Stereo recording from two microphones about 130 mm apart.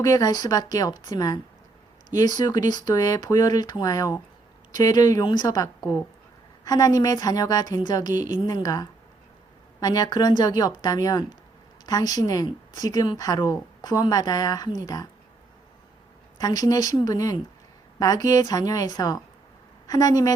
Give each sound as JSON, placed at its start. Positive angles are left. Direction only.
{"t": 0.0, "sound": "a woman's voice", "side_deg": 30}
{"t": 6.7, "sound": "a woman's voice", "side_deg": 30}
{"t": 16.4, "sound": "a woman's voice", "side_deg": 30}